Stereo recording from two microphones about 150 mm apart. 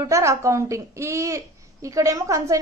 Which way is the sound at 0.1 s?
20° right (ahead or behind).